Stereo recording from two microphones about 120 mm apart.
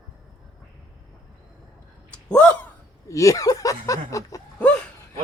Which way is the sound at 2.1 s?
10° left (ahead or behind).